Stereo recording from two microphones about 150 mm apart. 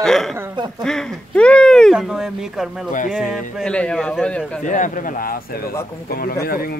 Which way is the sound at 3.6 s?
5° left (ahead or behind).